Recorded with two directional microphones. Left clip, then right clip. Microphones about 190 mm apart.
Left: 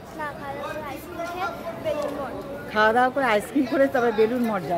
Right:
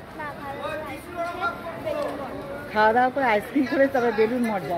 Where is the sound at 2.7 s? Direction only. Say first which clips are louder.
Even; centre (ahead or behind).